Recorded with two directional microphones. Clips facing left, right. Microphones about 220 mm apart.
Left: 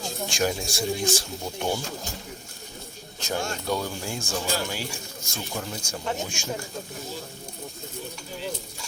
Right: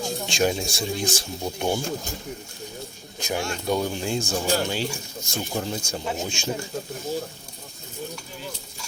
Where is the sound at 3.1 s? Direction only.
15° right (ahead or behind).